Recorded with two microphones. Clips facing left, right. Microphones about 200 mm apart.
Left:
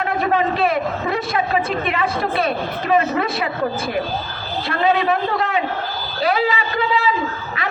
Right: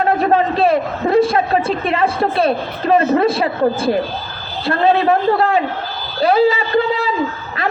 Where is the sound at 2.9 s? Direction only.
30° right (ahead or behind).